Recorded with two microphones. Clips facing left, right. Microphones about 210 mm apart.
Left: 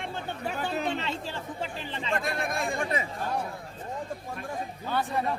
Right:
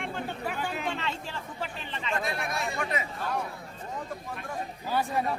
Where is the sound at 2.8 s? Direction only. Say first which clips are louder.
Left 2 dB; 30° left (ahead or behind).